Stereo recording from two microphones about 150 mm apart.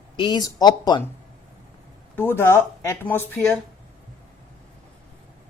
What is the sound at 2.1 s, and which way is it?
Speech, 15° left (ahead or behind).